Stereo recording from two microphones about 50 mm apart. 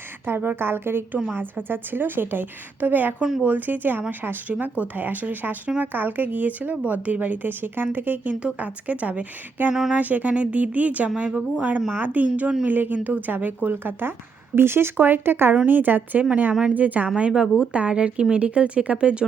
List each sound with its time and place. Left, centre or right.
0.3 s a woman's voice: right
8.3 s a woman's voice: right
14.5 s a woman's voice: right
17.2 s a woman's voice: centre